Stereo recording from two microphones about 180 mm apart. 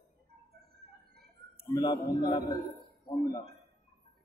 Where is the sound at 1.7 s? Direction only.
25° left (ahead or behind).